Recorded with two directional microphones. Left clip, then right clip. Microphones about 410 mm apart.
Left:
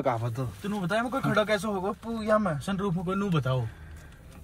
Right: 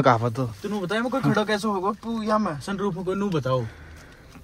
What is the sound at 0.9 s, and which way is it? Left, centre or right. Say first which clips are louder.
Speech: right 2 dB; centre.